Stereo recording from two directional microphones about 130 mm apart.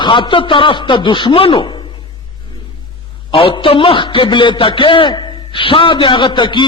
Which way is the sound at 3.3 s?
45° left (ahead or behind).